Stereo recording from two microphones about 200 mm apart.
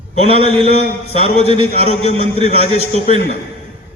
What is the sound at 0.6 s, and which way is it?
A man's voice, 30° left (ahead or behind).